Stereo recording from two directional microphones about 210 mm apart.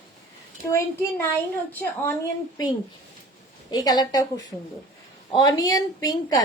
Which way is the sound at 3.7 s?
20° left (ahead or behind).